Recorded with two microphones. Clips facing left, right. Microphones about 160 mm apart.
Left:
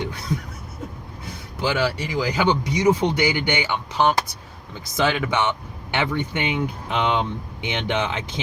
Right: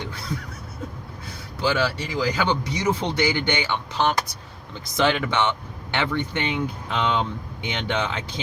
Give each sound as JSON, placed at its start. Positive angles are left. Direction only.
{"t": 1.6, "sound": "speech", "side_deg": 15}